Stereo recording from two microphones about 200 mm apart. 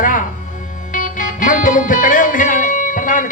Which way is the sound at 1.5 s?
40° left (ahead or behind).